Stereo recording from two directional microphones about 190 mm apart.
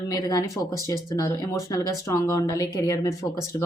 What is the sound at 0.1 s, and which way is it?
Speech, 20° left (ahead or behind).